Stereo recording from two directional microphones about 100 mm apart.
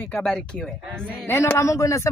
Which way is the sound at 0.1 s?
Centre (ahead or behind).